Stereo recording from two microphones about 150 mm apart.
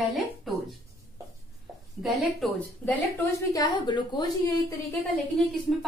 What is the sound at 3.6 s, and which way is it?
Speech, 30° left (ahead or behind).